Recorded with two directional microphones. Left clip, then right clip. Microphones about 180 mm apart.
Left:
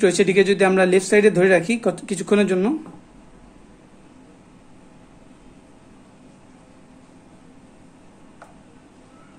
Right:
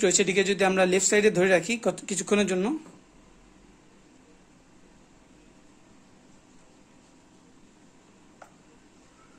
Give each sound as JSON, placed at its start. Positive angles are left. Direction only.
{"t": 0.0, "sound": "speech", "side_deg": -15}